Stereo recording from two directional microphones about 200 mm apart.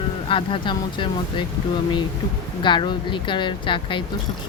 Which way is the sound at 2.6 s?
25° left (ahead or behind).